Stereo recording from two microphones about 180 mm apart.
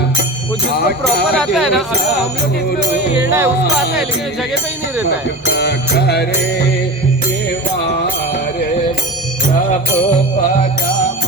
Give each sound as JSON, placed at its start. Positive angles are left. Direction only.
{"t": 0.8, "sound": "music", "side_deg": 60}
{"t": 1.4, "sound": "speech", "side_deg": 0}
{"t": 3.2, "sound": "speech", "side_deg": -10}
{"t": 5.5, "sound": "music", "side_deg": 60}